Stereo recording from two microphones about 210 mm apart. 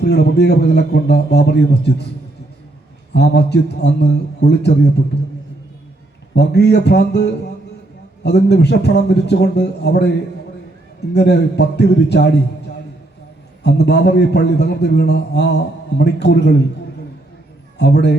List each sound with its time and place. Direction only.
0.0 s a man's voice: 50° left (ahead or behind)
3.1 s a man's voice: 55° left (ahead or behind)
6.3 s a man's voice: 55° left (ahead or behind)
11.1 s a man's voice: 50° left (ahead or behind)
13.7 s a man's voice: 50° left (ahead or behind)
17.7 s a man's voice: 55° left (ahead or behind)